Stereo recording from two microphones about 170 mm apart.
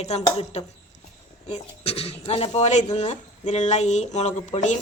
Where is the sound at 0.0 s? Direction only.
40° left (ahead or behind).